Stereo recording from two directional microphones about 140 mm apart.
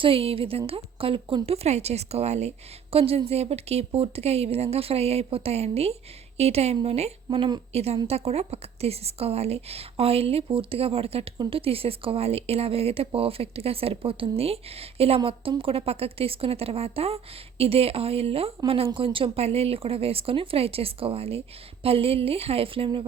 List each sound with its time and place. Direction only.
0.0 s a woman's voice: 40° right (ahead or behind)